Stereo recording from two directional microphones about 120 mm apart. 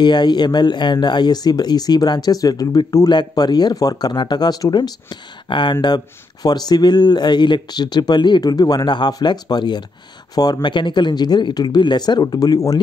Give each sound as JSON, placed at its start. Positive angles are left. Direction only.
{"t": 0.0, "sound": "speech", "side_deg": 40}